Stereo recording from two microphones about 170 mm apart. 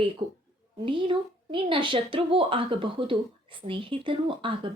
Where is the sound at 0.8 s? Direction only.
30° right (ahead or behind).